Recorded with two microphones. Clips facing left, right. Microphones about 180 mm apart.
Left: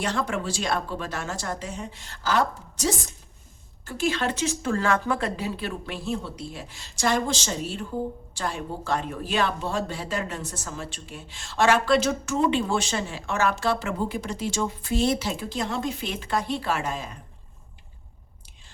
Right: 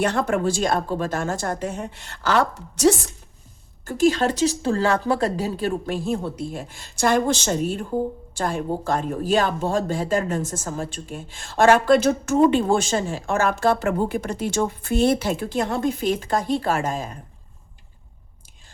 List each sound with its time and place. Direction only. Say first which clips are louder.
0.0 s a woman's voice: right 6 dB; 55° right (ahead or behind); by 2.9 s 70° right (ahead or behind)
3.8 s speech: right 7 dB; 45° right (ahead or behind)